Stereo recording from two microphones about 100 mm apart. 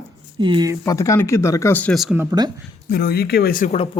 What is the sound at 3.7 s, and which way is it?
Speech, 65° left (ahead or behind).